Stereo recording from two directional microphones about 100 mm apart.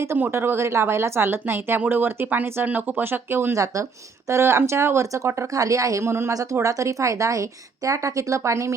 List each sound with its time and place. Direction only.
0.0 s a woman's voice: 25° right (ahead or behind)